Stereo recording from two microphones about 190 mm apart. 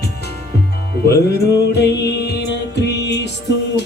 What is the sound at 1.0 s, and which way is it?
Music, 55° left (ahead or behind).